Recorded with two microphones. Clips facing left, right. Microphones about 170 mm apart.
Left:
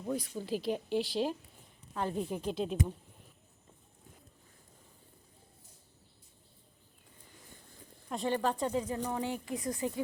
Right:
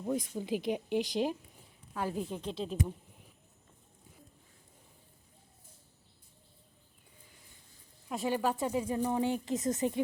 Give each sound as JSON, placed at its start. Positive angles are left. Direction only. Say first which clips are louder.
{"t": 0.0, "sound": "speech", "louder": "right 2 dB", "side_deg": -10}
{"t": 2.3, "sound": "speech", "louder": "left 3 dB", "side_deg": 5}
{"t": 8.1, "sound": "speech", "louder": "even", "side_deg": -5}